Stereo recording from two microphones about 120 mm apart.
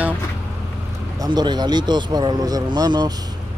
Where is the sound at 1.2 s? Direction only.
35° right (ahead or behind).